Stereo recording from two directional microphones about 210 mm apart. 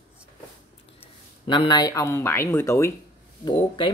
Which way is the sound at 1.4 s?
20° left (ahead or behind).